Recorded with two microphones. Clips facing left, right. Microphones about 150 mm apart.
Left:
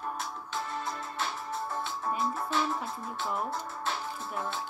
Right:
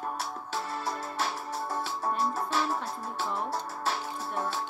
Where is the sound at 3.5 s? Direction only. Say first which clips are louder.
Right 2 dB; 40° right (ahead or behind).